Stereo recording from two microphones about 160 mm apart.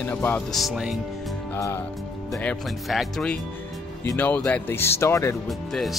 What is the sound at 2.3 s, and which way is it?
Speech, centre (ahead or behind).